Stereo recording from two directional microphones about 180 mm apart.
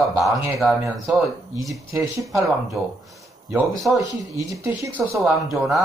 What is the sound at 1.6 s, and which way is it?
Speech, 20° right (ahead or behind).